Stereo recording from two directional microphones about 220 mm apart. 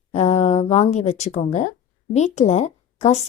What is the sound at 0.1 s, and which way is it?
A woman's voice, 30° left (ahead or behind).